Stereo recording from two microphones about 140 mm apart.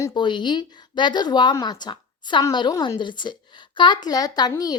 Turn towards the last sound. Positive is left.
turn(degrees=25)  # may be behind; listen again after turning